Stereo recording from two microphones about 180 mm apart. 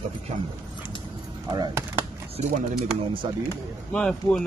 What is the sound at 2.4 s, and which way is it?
Speech, 35° right (ahead or behind).